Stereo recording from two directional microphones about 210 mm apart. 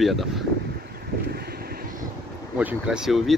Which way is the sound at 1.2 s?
50° right (ahead or behind).